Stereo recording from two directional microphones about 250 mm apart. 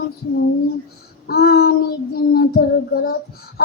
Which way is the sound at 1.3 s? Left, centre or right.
Left.